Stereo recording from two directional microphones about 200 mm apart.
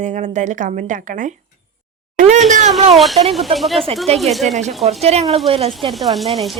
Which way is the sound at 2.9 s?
Centre (ahead or behind).